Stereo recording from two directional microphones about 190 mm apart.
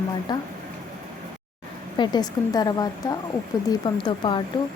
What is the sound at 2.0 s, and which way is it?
Speech, 20° left (ahead or behind).